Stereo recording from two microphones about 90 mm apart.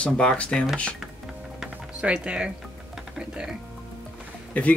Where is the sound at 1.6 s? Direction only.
10° right (ahead or behind).